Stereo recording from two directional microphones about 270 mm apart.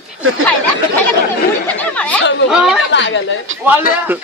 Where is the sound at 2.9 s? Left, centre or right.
Left.